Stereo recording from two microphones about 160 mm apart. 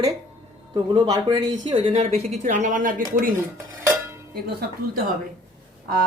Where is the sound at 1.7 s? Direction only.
35° right (ahead or behind).